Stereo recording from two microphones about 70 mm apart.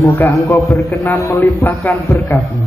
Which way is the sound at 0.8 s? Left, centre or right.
Left.